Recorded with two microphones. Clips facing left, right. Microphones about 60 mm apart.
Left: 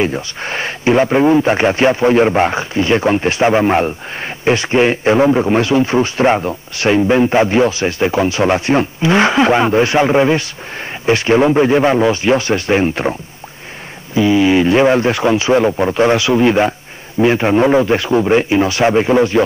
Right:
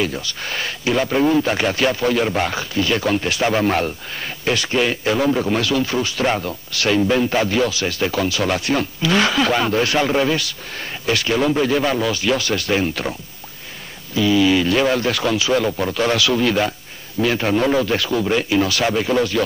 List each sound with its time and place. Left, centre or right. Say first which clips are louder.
0.0 s a man's voice: left 5 dB; left
14.1 s a man's voice: left 4 dB; left